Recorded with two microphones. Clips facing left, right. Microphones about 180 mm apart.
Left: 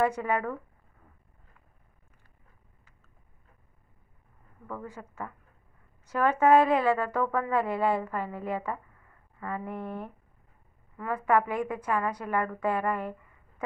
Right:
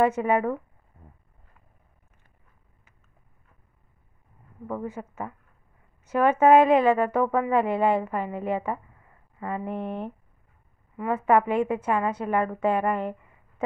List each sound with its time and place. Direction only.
0.0 s a woman's voice: 20° right (ahead or behind)
4.6 s a woman's voice: 20° right (ahead or behind)